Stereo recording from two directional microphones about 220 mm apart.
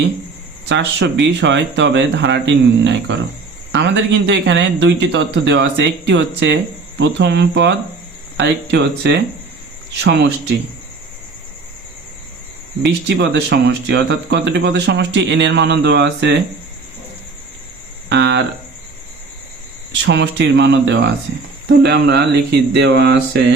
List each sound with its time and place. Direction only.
0.7 s speech: 55° right (ahead or behind)
13.1 s speech: 50° right (ahead or behind)
18.1 s speech: 50° right (ahead or behind)
20.1 s speech: 55° right (ahead or behind)